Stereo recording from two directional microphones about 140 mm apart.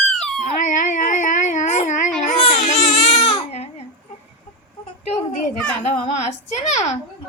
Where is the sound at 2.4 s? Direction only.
55° left (ahead or behind).